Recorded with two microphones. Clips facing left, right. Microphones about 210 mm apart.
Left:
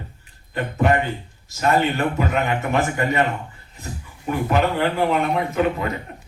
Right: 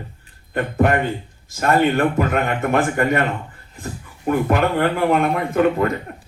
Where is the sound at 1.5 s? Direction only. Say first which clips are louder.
Right 3 dB; 50° right (ahead or behind).